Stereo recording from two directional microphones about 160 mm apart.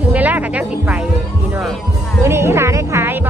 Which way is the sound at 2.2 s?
15° right (ahead or behind).